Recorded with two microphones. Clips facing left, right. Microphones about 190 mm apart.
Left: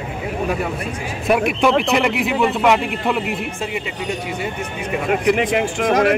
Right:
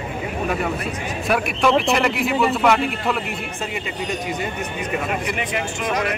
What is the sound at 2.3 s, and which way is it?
Speech, 15° left (ahead or behind).